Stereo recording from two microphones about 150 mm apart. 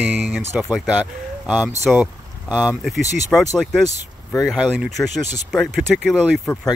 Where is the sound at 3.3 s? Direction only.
5° left (ahead or behind).